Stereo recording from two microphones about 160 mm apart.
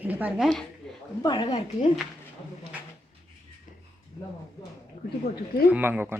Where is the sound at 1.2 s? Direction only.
30° left (ahead or behind).